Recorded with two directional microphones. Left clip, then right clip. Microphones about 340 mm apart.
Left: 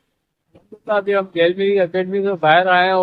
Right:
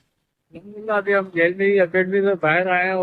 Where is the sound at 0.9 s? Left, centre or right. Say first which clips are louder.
Left 2 dB; centre.